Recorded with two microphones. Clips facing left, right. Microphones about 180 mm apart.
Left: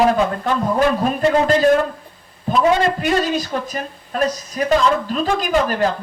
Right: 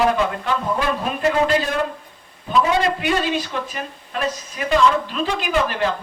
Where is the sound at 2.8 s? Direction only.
40° left (ahead or behind).